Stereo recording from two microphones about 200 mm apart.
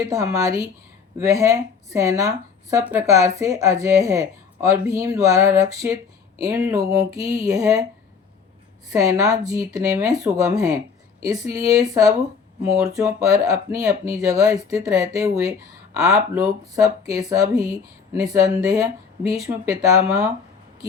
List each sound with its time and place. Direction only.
0.1 s speech: 15° right (ahead or behind)
8.9 s speech: 15° right (ahead or behind)